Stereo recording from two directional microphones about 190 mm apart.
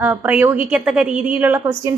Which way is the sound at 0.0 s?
10° right (ahead or behind).